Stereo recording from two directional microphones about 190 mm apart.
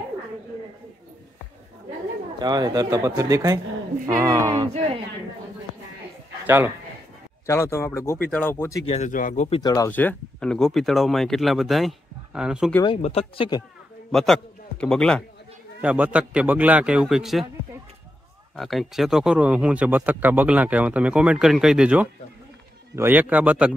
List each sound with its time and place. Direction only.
2.3 s speech: 20° right (ahead or behind)
6.4 s a man's voice: 10° right (ahead or behind)
7.4 s speech: 15° left (ahead or behind)
8.8 s speech: 35° left (ahead or behind)
9.6 s speech: 15° left (ahead or behind); by 12.7 s 5° right (ahead or behind)
12.8 s speech: 30° left (ahead or behind)
14.1 s a man's voice: centre (ahead or behind)
15.8 s speech: 5° right (ahead or behind)
18.6 s speech: centre (ahead or behind)